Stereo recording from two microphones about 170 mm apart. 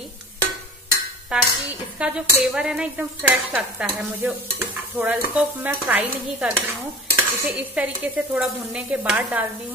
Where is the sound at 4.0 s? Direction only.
10° right (ahead or behind).